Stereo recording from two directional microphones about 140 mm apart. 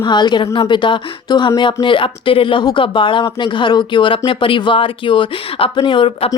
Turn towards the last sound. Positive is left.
turn(degrees=40)  # may be behind; listen again after turning